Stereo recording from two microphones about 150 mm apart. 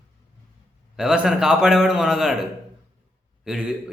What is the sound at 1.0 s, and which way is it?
A man's voice, 5° right (ahead or behind).